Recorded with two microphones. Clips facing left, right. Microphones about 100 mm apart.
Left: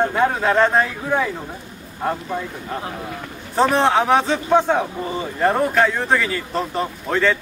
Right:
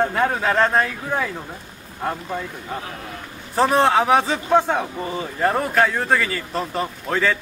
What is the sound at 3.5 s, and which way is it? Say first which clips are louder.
A man's voice: even; centre (ahead or behind).